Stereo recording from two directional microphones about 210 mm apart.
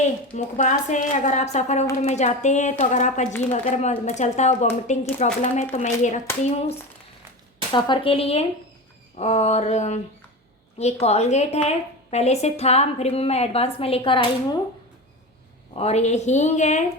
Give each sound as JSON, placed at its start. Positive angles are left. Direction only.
{"t": 0.3, "sound": "a woman's voice", "side_deg": 35}
{"t": 15.7, "sound": "a woman's voice", "side_deg": 30}